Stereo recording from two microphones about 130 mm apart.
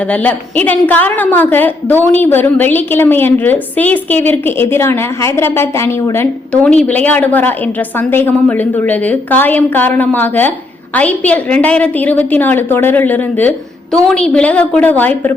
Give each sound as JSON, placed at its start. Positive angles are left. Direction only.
{"t": 0.0, "sound": "a woman's voice", "side_deg": 10}
{"t": 6.5, "sound": "a woman's voice", "side_deg": 10}